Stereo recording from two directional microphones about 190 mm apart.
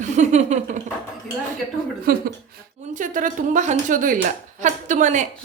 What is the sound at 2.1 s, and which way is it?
Speech, 55° right (ahead or behind).